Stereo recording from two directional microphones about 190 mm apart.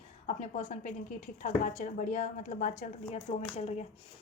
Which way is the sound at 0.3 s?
40° left (ahead or behind).